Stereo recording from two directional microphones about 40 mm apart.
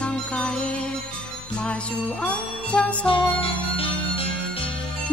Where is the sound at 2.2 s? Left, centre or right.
Left.